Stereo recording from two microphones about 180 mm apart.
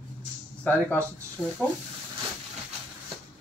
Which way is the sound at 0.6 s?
10° left (ahead or behind).